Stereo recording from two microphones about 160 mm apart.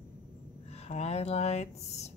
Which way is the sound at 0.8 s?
40° left (ahead or behind).